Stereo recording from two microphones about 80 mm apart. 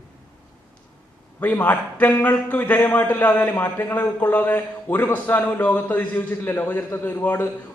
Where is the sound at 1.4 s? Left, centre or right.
Centre.